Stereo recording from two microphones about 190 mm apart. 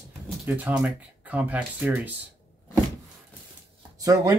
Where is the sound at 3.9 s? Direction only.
20° right (ahead or behind).